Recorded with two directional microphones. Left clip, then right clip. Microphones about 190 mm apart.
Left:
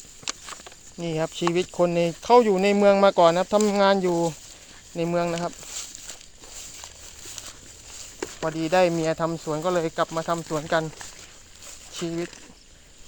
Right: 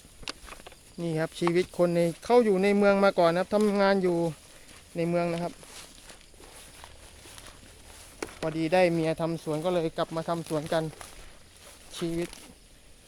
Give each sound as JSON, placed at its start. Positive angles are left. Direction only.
{"t": 0.3, "sound": "walk", "side_deg": 40}
{"t": 0.9, "sound": "speech", "side_deg": -5}
{"t": 5.6, "sound": "a sound", "side_deg": 60}
{"t": 8.2, "sound": "speech", "side_deg": 0}
{"t": 12.0, "sound": "speech", "side_deg": -5}